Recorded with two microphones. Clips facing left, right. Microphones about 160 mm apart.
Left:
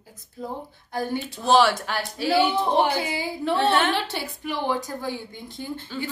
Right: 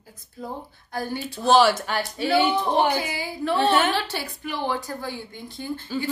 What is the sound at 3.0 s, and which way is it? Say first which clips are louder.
Speech: left 1 dB; 20° left (ahead or behind).